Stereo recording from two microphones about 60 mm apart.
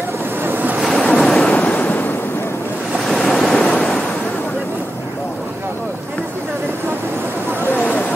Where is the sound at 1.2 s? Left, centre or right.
Centre.